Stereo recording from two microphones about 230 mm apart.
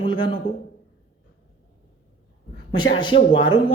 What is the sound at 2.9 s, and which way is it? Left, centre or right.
Speech, left.